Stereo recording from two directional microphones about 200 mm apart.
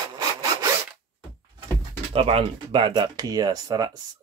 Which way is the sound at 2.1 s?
30° right (ahead or behind).